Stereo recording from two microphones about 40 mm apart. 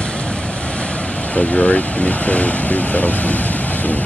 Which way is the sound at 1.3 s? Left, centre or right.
Left.